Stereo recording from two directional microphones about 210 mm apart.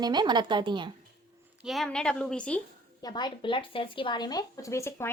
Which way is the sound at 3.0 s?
20° left (ahead or behind).